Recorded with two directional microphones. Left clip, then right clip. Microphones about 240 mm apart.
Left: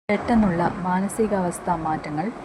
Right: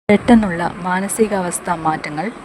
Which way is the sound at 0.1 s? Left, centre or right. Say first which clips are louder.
Right 8 dB; right.